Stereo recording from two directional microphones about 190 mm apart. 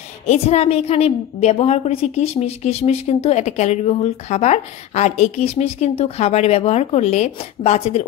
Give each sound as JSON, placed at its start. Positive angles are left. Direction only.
{"t": 0.3, "sound": "a woman's voice", "side_deg": 35}